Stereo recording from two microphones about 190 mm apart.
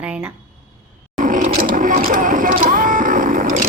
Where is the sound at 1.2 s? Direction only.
45° right (ahead or behind).